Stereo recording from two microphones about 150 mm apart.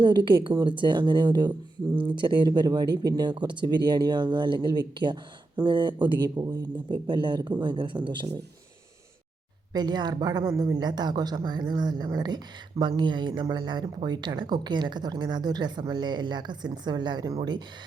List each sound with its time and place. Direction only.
0.0 s speech: 30° right (ahead or behind)
9.7 s speech: 30° right (ahead or behind)